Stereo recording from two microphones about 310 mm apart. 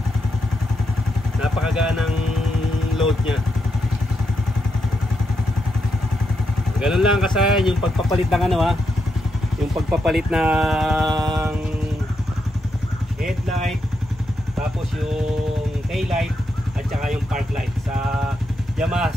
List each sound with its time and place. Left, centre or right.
1.4 s speech: centre
6.8 s speech: centre
9.8 s speech: centre
11.1 s music: centre
15.9 s speech: centre
18.8 s speech: centre